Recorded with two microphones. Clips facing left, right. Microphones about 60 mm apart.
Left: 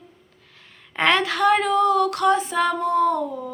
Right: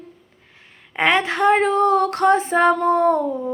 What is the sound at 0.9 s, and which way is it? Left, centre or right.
Female singing, centre.